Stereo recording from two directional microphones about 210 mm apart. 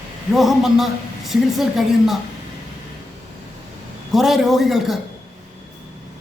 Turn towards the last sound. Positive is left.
turn(degrees=0)  # may be behind; listen again after turning